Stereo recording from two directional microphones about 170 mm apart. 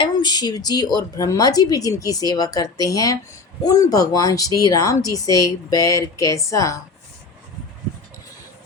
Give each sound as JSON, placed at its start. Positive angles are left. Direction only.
{"t": 0.0, "sound": "speech", "side_deg": 25}